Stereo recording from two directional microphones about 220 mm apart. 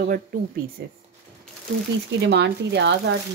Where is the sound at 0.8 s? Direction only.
50° right (ahead or behind).